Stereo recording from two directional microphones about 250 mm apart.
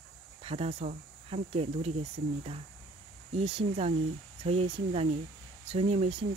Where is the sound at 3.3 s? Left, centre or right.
Right.